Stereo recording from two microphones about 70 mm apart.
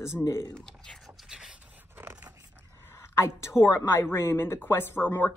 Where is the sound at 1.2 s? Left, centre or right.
Centre.